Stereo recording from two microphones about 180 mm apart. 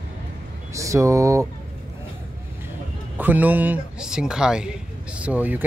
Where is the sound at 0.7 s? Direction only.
15° right (ahead or behind).